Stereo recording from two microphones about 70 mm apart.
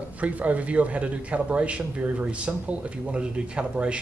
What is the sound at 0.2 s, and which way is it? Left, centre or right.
A man's voice, right.